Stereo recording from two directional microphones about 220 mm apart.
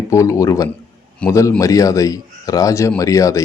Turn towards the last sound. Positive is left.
turn(degrees=15)  # may be behind; listen again after turning